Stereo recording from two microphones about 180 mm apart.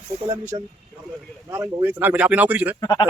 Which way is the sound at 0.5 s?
25° right (ahead or behind).